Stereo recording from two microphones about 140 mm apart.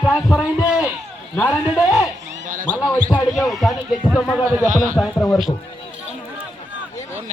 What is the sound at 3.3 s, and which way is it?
Speech, centre (ahead or behind).